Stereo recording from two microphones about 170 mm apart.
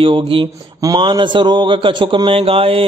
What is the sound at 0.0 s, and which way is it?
A man's voice, 30° right (ahead or behind).